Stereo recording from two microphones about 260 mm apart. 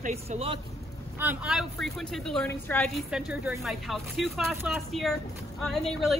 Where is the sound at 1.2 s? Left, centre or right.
Centre.